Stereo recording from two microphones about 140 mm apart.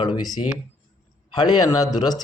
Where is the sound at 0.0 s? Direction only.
35° left (ahead or behind).